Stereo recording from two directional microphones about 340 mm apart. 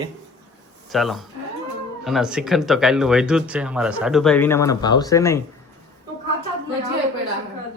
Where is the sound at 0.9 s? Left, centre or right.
Centre.